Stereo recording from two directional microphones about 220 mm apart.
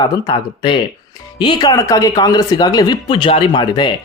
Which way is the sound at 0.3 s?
20° left (ahead or behind).